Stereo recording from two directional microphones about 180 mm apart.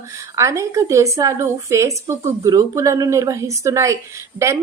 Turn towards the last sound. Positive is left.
turn(degrees=-15)  # may be behind; listen again after turning